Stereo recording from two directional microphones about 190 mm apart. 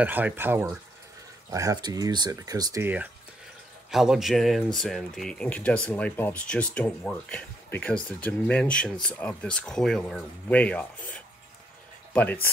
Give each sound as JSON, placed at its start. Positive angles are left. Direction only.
{"t": 0.0, "sound": "speech", "side_deg": -10}